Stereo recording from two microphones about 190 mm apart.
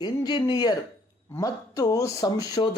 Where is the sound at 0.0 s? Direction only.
20° left (ahead or behind).